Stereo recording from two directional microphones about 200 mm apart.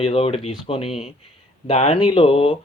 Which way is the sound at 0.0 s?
30° left (ahead or behind).